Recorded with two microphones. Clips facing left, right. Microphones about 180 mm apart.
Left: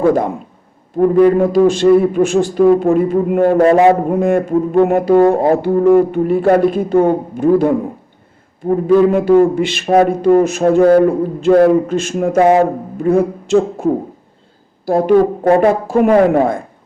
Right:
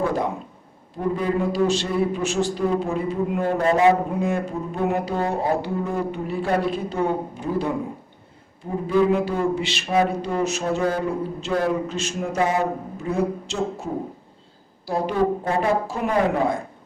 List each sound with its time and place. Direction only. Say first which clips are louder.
0.0 s a man's voice: left 10 dB; 50° left (ahead or behind)
8.6 s a man's voice: left 9 dB; 60° left (ahead or behind)